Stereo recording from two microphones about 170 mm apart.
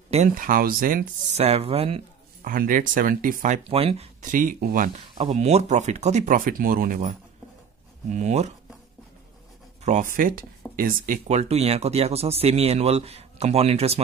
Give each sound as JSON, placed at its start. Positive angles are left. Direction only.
{"t": 0.3, "sound": "speech", "side_deg": -55}
{"t": 1.3, "sound": "speech", "side_deg": -35}
{"t": 2.4, "sound": "speech", "side_deg": -55}
{"t": 3.6, "sound": "speech", "side_deg": -35}
{"t": 4.2, "sound": "speech", "side_deg": -50}
{"t": 5.1, "sound": "speech", "side_deg": -40}
{"t": 9.8, "sound": "speech", "side_deg": -50}